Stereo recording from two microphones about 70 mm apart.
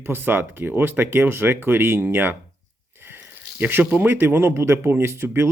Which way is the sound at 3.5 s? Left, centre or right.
Right.